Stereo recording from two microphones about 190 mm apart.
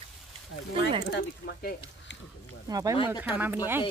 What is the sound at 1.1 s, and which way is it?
Speech, 55° left (ahead or behind).